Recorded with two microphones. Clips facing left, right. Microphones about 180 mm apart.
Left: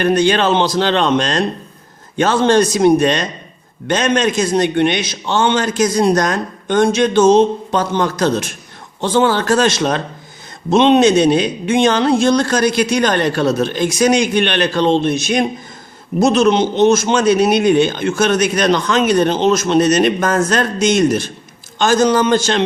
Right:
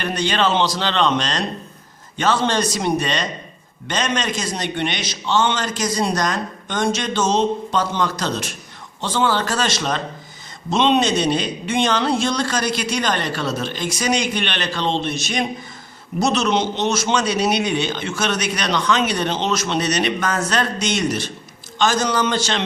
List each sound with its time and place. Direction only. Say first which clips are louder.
0.0 s a man's voice: left 7 dB; 50° left (ahead or behind)